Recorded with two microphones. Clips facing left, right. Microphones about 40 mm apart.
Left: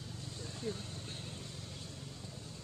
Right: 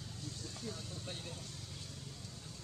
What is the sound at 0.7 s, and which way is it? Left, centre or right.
Speech, left.